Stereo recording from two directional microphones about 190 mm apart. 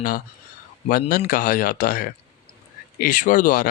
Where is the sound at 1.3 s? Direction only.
45° left (ahead or behind).